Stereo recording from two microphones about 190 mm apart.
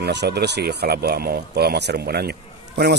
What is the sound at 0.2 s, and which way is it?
A man's voice, 55° right (ahead or behind).